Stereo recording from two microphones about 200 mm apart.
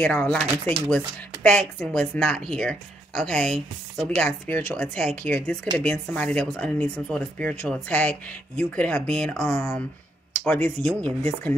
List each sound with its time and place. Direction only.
0.0 s speech: 5° left (ahead or behind)